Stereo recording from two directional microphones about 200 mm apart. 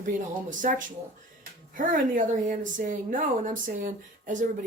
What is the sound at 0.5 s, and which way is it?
A woman's voice, 40° right (ahead or behind).